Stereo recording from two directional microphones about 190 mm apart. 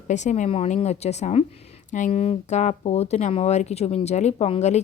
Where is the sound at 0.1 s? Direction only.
40° left (ahead or behind).